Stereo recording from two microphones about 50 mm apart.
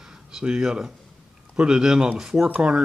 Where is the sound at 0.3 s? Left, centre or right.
Centre.